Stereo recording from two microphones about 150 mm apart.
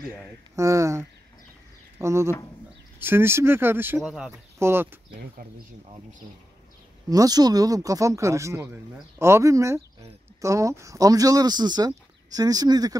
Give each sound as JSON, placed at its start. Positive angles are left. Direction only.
{"t": 0.6, "sound": "speech", "side_deg": -20}
{"t": 4.6, "sound": "speech", "side_deg": -15}
{"t": 7.1, "sound": "speech", "side_deg": -25}